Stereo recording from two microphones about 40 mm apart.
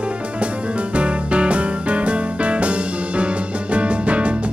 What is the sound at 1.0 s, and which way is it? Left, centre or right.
Music, right.